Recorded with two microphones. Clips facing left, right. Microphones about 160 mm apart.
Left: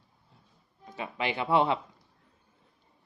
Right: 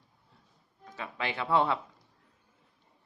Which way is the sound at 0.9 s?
20° left (ahead or behind).